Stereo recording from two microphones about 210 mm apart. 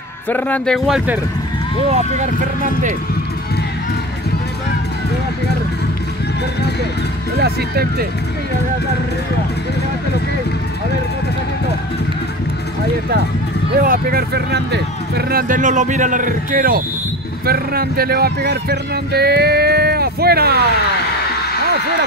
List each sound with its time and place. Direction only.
0.3 s speech: 10° left (ahead or behind)
1.9 s speech: 35° right (ahead or behind)
7.3 s speech: 50° right (ahead or behind)
13.7 s speech: 45° right (ahead or behind)